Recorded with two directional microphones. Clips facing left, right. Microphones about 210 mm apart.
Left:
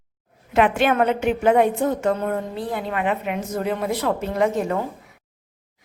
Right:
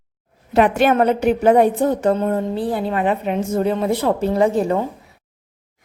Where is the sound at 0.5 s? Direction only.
40° right (ahead or behind).